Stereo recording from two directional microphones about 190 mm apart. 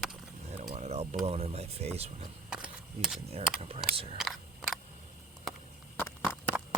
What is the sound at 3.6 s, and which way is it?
Speech, 30° right (ahead or behind).